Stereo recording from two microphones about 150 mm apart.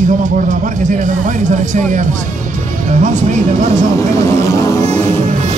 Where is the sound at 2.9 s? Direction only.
55° right (ahead or behind).